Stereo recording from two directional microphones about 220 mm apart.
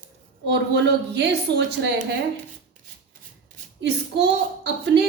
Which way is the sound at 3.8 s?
50° right (ahead or behind).